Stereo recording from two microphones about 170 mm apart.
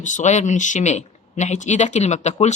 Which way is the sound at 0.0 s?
45° left (ahead or behind).